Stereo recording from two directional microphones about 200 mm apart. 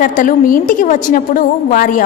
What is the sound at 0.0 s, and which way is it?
A woman's voice, 40° left (ahead or behind).